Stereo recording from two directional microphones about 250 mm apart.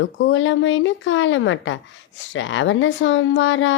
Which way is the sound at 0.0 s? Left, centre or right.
Left.